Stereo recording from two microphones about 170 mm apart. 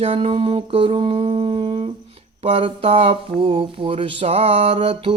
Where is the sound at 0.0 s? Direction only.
35° right (ahead or behind).